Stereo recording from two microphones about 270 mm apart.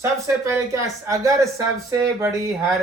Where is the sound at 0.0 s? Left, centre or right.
Centre.